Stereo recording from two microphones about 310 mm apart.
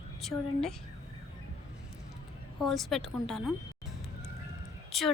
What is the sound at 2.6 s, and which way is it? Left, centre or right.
Speech, centre.